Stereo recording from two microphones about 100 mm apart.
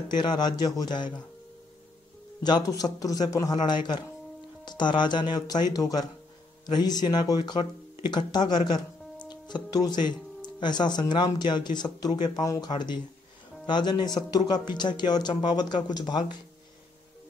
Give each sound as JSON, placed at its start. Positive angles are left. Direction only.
{"t": 0.2, "sound": "speech", "side_deg": 45}
{"t": 2.4, "sound": "a man's voice", "side_deg": 40}